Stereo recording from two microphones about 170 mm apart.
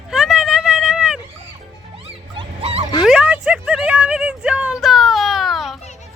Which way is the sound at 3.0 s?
5° right (ahead or behind).